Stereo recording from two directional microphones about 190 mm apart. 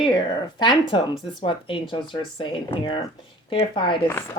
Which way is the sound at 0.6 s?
25° left (ahead or behind).